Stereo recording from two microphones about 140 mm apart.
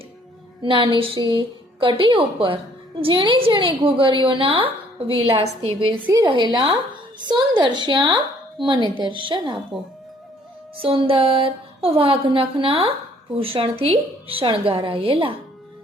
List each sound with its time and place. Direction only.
0.6 s a woman's voice: 35° right (ahead or behind)
10.8 s a woman's voice: 40° right (ahead or behind)